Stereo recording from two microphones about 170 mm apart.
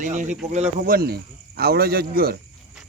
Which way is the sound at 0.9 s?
65° right (ahead or behind).